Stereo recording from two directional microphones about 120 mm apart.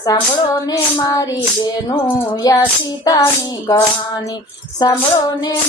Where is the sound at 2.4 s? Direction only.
30° left (ahead or behind).